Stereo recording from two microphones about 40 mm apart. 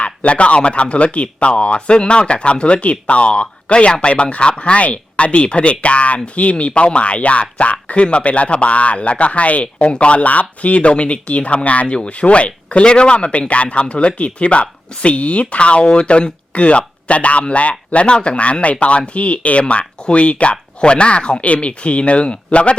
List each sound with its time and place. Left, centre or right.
0.0 s speech: left